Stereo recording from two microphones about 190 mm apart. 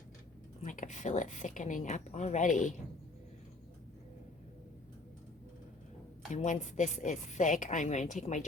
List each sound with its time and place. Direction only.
0.6 s a woman's voice: 40° left (ahead or behind)
6.3 s a woman's voice: 40° left (ahead or behind)